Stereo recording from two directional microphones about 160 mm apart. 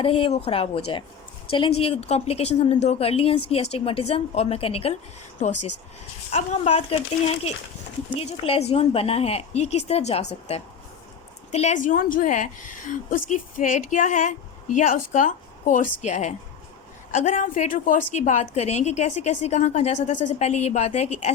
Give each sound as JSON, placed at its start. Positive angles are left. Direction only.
{"t": 0.0, "sound": "speech", "side_deg": 35}
{"t": 6.3, "sound": "a woman's voice", "side_deg": 45}